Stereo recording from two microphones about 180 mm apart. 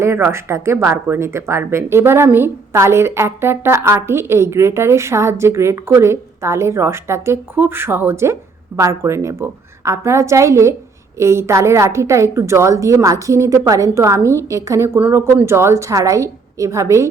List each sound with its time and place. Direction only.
0.0 s speech: 15° right (ahead or behind)